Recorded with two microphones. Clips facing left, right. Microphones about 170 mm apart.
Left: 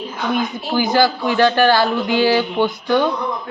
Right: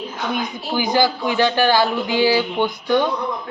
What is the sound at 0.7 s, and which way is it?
A man's voice, 15° right (ahead or behind).